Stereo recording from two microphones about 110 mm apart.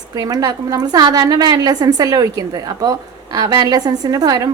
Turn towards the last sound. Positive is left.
turn(degrees=-35)  # may be behind; listen again after turning